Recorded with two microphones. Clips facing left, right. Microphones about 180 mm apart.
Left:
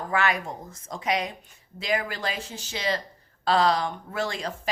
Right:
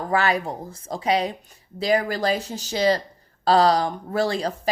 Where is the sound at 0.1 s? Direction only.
35° right (ahead or behind).